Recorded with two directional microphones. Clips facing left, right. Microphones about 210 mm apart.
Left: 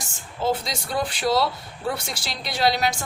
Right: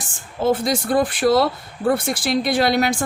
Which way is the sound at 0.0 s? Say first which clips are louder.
Right 5 dB; 55° right (ahead or behind).